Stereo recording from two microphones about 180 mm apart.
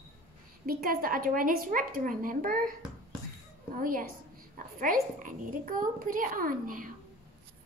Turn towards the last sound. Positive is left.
turn(degrees=-50)  # may be behind; listen again after turning